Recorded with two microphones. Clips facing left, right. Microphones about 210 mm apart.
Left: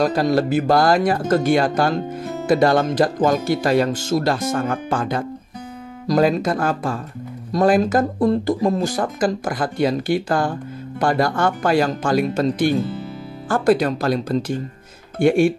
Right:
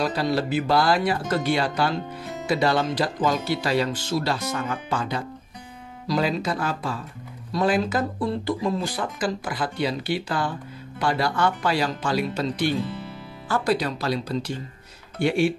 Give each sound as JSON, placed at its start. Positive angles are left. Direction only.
{"t": 0.0, "sound": "speech", "side_deg": 45}